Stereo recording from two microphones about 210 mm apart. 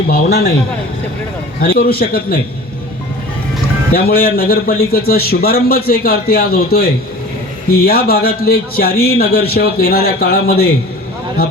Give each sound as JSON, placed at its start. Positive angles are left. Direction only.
{"t": 0.1, "sound": "a man's voice", "side_deg": 50}
{"t": 1.6, "sound": "a man's voice", "side_deg": 45}
{"t": 3.9, "sound": "a man's voice", "side_deg": 45}